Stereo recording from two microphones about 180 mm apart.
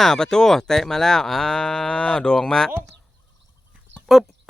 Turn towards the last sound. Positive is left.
turn(degrees=0)  # may be behind; listen again after turning